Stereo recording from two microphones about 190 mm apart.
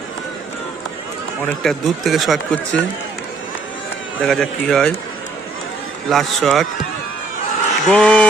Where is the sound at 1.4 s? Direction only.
Centre (ahead or behind).